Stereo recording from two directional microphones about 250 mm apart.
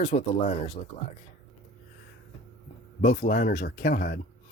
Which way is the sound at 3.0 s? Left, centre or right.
Left.